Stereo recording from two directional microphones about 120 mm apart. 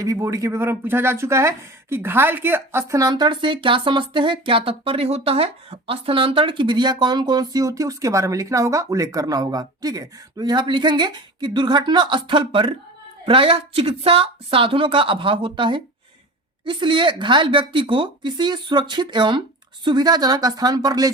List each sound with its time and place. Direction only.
0.0 s a woman's voice: 25° right (ahead or behind)